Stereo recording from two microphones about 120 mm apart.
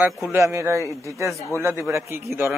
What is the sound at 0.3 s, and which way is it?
A man's voice, 25° right (ahead or behind).